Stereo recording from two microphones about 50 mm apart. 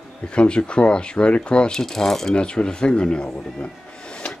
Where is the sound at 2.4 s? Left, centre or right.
Centre.